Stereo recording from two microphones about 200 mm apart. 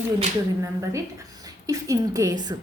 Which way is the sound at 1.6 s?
15° right (ahead or behind).